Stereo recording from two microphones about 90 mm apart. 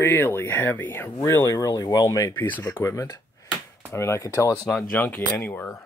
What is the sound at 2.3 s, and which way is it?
Speech, 25° left (ahead or behind).